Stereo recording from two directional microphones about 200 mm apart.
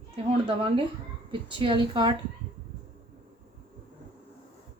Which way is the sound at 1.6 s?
25° right (ahead or behind).